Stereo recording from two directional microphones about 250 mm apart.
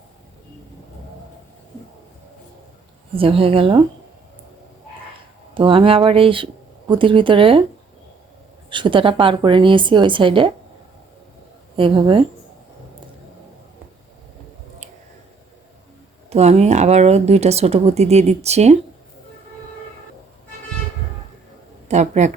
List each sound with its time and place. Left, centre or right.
3.2 s speech: right
5.5 s speech: right
8.7 s speech: centre
11.8 s speech: centre
16.3 s speech: right
21.8 s speech: right